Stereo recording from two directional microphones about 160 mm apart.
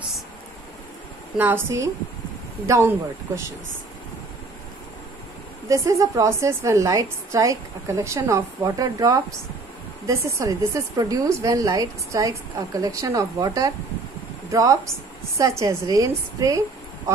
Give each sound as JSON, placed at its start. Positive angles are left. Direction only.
{"t": 1.4, "sound": "speech", "side_deg": -15}
{"t": 5.7, "sound": "a woman's voice", "side_deg": -20}